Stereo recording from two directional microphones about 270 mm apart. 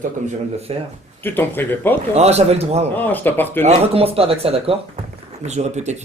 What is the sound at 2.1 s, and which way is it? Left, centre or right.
Speech, right.